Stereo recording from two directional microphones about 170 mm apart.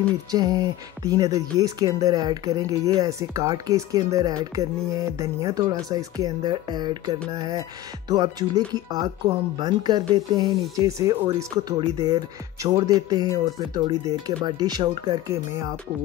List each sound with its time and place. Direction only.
0.3 s speech: 25° right (ahead or behind)